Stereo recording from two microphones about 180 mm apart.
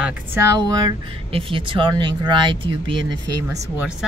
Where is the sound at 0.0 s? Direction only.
15° right (ahead or behind).